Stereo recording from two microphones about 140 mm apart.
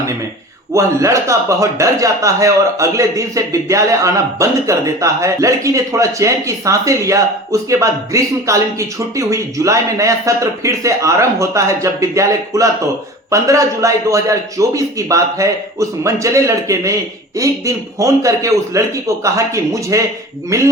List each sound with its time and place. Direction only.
0.7 s a man's voice: 20° right (ahead or behind)